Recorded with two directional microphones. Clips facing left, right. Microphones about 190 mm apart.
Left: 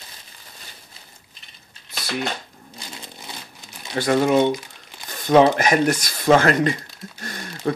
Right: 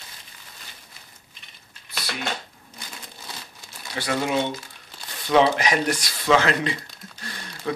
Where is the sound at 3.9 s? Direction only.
45° left (ahead or behind).